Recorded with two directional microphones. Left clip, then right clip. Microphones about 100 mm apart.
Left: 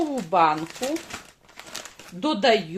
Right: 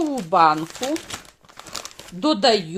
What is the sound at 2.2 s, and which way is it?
Speech, 55° right (ahead or behind).